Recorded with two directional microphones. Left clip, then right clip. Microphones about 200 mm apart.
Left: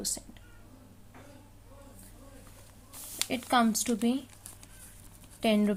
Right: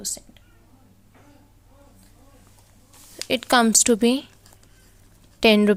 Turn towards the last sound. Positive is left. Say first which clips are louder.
# right 11 dB
turn(degrees=-50)  # may be behind; listen again after turning